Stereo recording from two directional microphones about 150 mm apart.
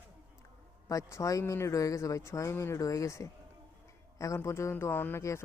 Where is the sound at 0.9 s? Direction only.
20° left (ahead or behind).